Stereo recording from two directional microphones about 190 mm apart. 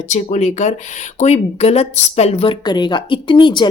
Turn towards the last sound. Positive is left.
turn(degrees=25)  # may be behind; listen again after turning